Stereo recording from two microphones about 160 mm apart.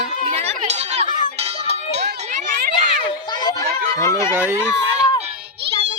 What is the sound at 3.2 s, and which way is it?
Children playing, 25° left (ahead or behind).